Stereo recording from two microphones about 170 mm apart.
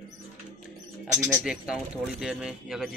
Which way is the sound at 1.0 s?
15° right (ahead or behind).